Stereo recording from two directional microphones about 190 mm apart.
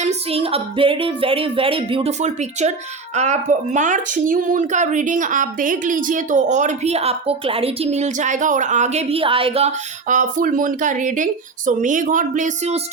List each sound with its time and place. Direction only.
0.0 s speech: 35° right (ahead or behind)